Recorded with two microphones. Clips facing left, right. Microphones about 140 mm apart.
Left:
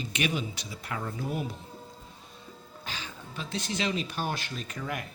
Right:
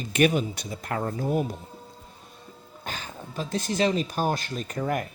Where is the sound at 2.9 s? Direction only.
45° right (ahead or behind).